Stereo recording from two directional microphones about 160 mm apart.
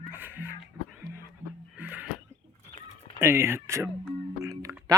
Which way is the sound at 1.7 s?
10° right (ahead or behind).